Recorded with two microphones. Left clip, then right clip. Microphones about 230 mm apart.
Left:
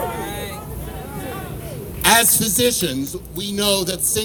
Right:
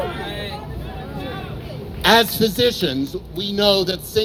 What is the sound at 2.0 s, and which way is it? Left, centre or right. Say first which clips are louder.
A man's voice: right 1 dB; left.